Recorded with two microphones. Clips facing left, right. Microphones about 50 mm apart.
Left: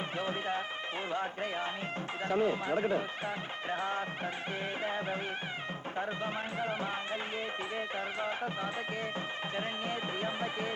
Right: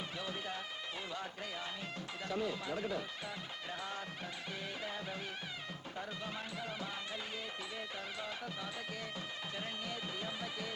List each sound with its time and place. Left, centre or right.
0.2 s speech: left